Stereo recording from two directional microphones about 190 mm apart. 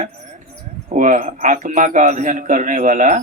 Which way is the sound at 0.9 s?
45° right (ahead or behind).